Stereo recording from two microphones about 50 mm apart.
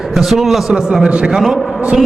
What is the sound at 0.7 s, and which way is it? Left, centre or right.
Speech, centre.